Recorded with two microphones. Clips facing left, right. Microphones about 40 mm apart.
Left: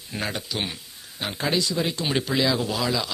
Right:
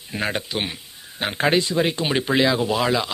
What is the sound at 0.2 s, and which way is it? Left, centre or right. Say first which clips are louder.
A man's voice: right 4 dB; right.